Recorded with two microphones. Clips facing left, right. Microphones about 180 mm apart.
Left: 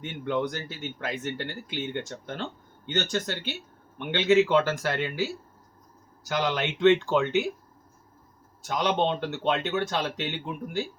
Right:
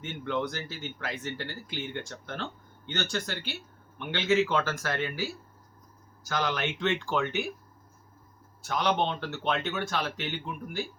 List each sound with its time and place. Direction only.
0.0 s speech: 15° left (ahead or behind)
8.6 s speech: 20° left (ahead or behind)